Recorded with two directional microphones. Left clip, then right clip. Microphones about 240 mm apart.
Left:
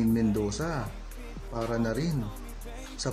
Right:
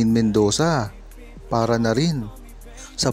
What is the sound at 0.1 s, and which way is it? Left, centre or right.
Speech, right.